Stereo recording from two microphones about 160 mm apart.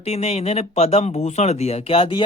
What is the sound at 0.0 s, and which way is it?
Speech, 40° left (ahead or behind).